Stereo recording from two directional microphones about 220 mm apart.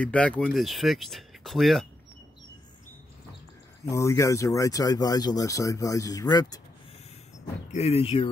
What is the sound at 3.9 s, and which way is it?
Speech, 15° left (ahead or behind).